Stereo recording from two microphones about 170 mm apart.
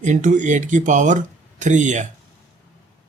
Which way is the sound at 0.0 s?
45° right (ahead or behind).